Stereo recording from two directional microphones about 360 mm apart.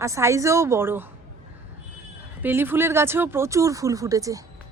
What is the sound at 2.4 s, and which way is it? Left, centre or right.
A woman's voice, centre.